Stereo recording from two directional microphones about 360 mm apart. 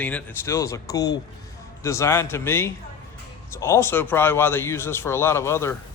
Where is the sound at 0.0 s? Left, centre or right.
Centre.